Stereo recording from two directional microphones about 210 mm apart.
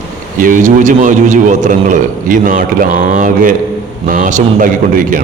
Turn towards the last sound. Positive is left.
turn(degrees=-40)  # may be behind; listen again after turning